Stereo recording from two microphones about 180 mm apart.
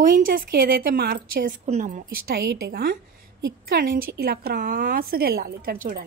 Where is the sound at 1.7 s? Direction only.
40° right (ahead or behind).